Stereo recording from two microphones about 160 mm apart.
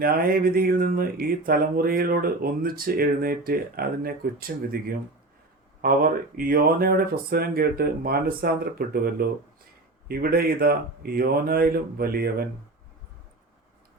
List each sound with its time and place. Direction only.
0.0 s speech: 65° right (ahead or behind)